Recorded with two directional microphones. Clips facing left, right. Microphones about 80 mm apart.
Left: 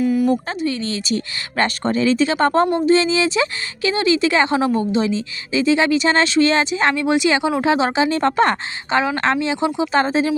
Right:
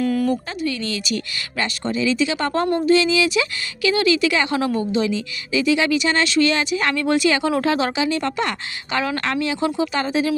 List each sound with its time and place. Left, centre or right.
0.0 s a sound: centre
0.6 s a woman's voice: left
1.5 s a woman's voice: left
9.0 s speech: left
9.9 s a woman's voice: left